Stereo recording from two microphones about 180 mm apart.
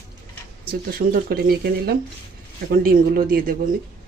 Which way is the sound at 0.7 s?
55° right (ahead or behind).